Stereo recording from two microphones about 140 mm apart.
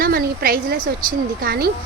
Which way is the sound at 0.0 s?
90° right.